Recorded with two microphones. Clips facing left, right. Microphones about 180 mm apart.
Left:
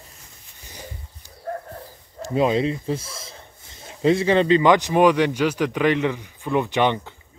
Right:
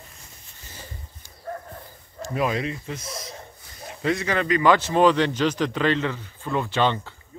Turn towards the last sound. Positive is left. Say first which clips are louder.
# left 2 dB
turn(degrees=15)  # may be behind; listen again after turning